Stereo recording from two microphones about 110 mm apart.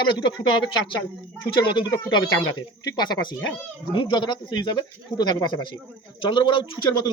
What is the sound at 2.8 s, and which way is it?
Speech, 40° left (ahead or behind).